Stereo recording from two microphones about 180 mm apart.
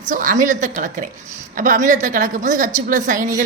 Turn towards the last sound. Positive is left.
turn(degrees=-45)  # may be behind; listen again after turning